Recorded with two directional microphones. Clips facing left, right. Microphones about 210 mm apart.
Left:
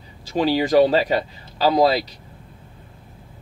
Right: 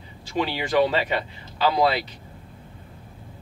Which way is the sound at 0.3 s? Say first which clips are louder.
Left 7 dB; 40° left (ahead or behind).